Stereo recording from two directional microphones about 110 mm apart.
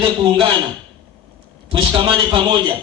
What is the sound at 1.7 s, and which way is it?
Speech, 45° right (ahead or behind).